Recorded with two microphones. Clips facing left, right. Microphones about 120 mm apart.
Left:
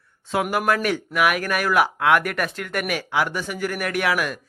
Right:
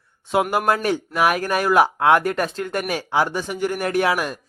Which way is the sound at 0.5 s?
30° right (ahead or behind).